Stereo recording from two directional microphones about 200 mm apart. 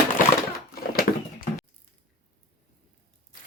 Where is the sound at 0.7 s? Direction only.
45° left (ahead or behind).